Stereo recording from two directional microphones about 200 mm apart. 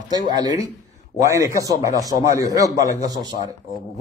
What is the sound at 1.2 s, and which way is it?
A man's voice, 15° right (ahead or behind).